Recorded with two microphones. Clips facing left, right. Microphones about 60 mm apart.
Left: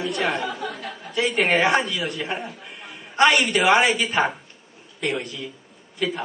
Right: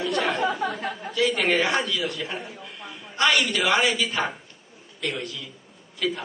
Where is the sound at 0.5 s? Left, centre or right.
Right.